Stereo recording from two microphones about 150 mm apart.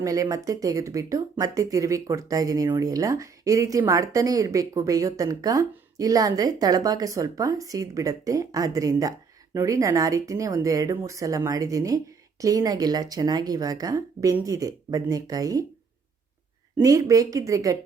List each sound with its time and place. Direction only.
0.0 s speech: 25° right (ahead or behind)
16.7 s speech: 25° right (ahead or behind)